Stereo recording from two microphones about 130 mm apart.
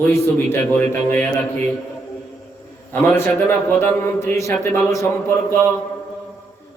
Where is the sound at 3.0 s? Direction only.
10° left (ahead or behind).